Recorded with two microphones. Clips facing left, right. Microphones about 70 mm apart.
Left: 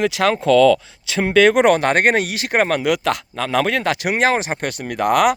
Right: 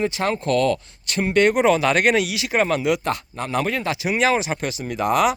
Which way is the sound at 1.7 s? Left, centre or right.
Left.